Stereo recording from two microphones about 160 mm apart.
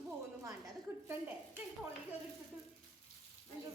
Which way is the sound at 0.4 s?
20° right (ahead or behind).